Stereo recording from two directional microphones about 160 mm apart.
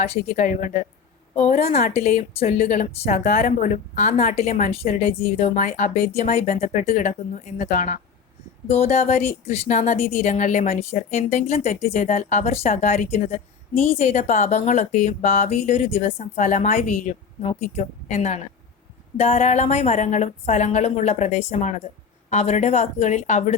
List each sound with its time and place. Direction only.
0.0 s speech: 45° left (ahead or behind)
1.4 s speech: 40° left (ahead or behind)
18.1 s speech: 45° left (ahead or behind)